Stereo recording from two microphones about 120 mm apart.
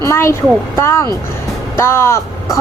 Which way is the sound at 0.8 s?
20° left (ahead or behind).